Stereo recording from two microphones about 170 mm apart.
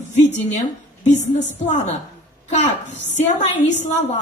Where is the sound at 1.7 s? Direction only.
40° left (ahead or behind).